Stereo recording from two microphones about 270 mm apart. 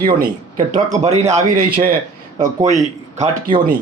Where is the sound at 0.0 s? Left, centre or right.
Right.